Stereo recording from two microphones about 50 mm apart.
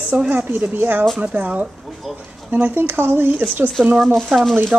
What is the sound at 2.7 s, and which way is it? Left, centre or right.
Speech, right.